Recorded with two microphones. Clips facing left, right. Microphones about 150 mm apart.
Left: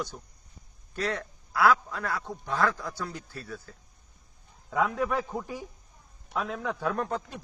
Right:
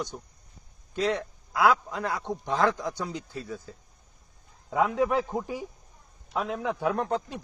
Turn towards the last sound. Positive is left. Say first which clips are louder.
# right 3 dB
turn(degrees=-15)  # may be behind; listen again after turning